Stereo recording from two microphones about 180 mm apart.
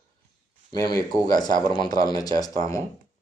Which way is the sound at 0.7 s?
20° left (ahead or behind).